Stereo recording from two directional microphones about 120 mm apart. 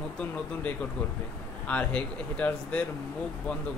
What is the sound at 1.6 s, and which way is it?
Speech, 10° left (ahead or behind).